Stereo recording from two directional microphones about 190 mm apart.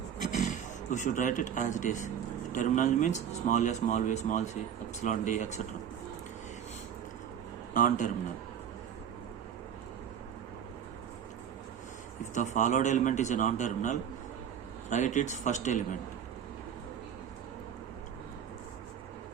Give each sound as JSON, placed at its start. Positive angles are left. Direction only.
{"t": 0.3, "sound": "speech", "side_deg": 40}
{"t": 7.7, "sound": "a man's voice", "side_deg": 45}
{"t": 12.2, "sound": "speech", "side_deg": 40}